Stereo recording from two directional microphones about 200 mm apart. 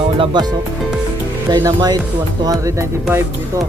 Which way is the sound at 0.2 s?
20° right (ahead or behind).